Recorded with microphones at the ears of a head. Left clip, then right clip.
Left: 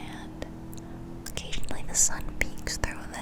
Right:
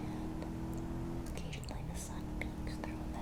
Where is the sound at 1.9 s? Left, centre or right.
Left.